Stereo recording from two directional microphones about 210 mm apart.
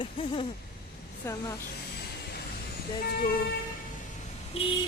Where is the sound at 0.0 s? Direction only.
25° left (ahead or behind).